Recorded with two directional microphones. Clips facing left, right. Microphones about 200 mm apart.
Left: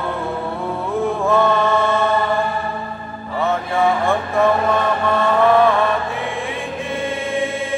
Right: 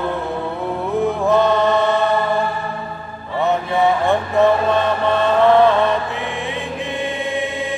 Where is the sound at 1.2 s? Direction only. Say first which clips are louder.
Right 1 dB; 20° right (ahead or behind).